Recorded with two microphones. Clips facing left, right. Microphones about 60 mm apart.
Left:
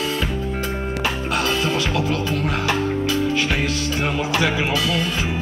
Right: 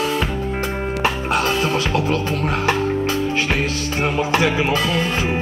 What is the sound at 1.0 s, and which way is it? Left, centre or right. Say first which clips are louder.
Music: right 3 dB; right.